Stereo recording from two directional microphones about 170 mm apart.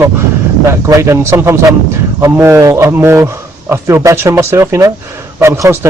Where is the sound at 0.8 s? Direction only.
15° right (ahead or behind).